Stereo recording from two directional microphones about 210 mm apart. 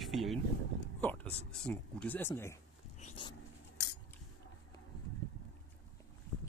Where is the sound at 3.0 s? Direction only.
35° left (ahead or behind).